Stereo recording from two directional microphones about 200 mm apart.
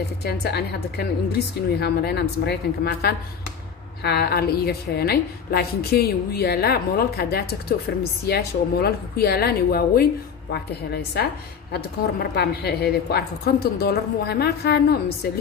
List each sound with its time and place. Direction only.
0.2 s a woman's voice: 55° left (ahead or behind)